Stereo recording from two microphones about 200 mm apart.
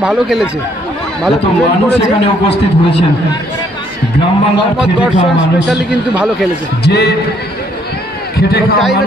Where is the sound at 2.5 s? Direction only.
60° left (ahead or behind).